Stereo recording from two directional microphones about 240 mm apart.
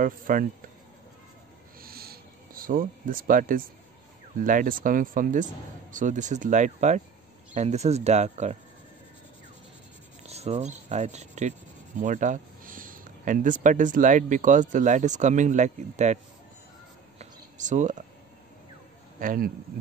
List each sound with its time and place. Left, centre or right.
0.0 s speech: right
1.8 s a sound: right
4.4 s speech: right
10.2 s speech: right
17.2 s a sound: right
19.1 s speech: right